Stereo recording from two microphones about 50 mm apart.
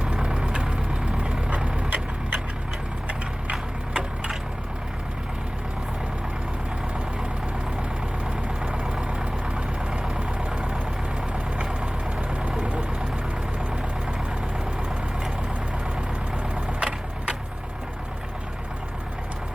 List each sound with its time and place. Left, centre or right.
0.0 s vehicle: centre
3.5 s a sound: centre
8.4 s vehicle: centre
16.6 s vehicle: centre